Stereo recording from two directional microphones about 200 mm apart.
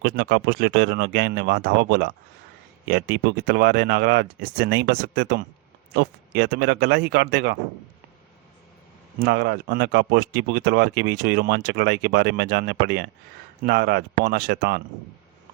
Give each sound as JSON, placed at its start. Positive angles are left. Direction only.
{"t": 0.0, "sound": "speech", "side_deg": -55}
{"t": 9.2, "sound": "speech", "side_deg": -55}